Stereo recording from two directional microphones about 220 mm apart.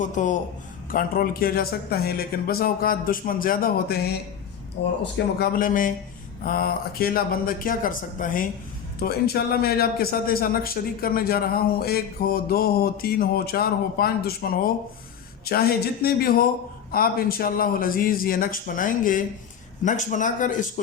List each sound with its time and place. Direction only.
0.0 s a man's voice: 35° left (ahead or behind)
5.1 s a man's voice: 40° left (ahead or behind)